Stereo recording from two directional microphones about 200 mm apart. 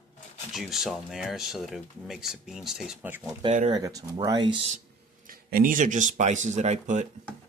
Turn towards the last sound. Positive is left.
turn(degrees=-35)  # may be behind; listen again after turning